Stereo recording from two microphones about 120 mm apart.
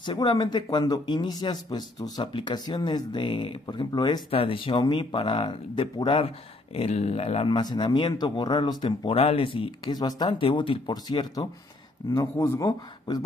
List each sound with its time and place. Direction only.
0.0 s speech: 40° left (ahead or behind)
4.3 s speech: 50° left (ahead or behind); by 10.3 s 35° left (ahead or behind)
10.4 s speech: 50° left (ahead or behind)
12.1 s a man's voice: 25° left (ahead or behind)